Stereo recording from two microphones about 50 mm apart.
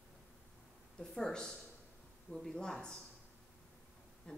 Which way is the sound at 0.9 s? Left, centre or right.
Centre.